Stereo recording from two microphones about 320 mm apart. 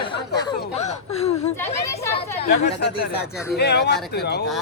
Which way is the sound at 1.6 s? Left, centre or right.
Centre.